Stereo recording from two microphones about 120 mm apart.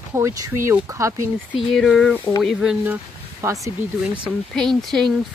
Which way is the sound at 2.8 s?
15° right (ahead or behind).